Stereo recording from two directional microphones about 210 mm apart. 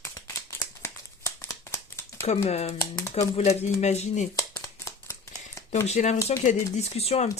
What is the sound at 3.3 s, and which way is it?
Speech, 30° left (ahead or behind).